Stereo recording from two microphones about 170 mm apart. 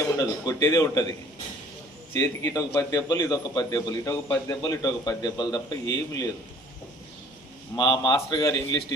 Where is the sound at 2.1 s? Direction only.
20° left (ahead or behind).